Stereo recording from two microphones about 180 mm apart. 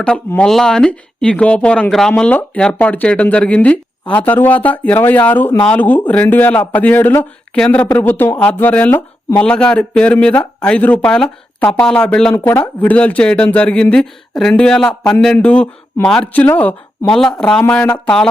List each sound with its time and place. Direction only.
0.0 s speech: 5° left (ahead or behind)